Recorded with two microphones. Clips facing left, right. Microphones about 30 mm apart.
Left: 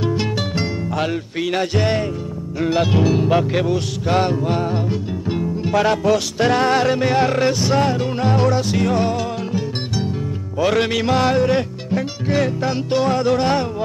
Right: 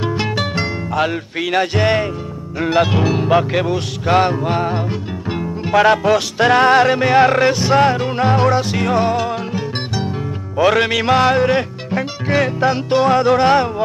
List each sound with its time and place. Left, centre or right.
0.0 s music: centre